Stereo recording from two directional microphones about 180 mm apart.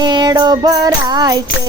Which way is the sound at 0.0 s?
25° right (ahead or behind).